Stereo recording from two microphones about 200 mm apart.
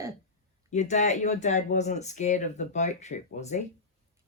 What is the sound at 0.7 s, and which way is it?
Speech, 35° left (ahead or behind).